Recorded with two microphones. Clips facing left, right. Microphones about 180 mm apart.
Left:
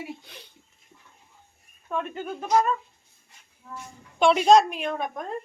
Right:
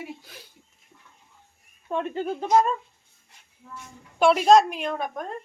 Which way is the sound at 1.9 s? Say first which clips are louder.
Right 3 dB; 30° right (ahead or behind).